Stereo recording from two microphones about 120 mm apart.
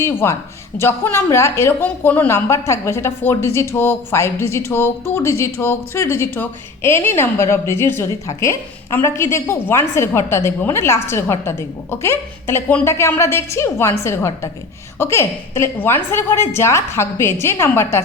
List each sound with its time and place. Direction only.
0.0 s a woman's voice: 20° left (ahead or behind)